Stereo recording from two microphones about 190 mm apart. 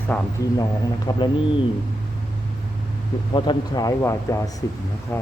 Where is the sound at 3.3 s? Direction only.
25° left (ahead or behind).